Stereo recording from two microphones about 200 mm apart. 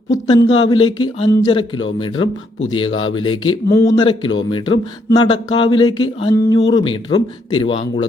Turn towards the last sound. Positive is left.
turn(degrees=25)  # may be behind; listen again after turning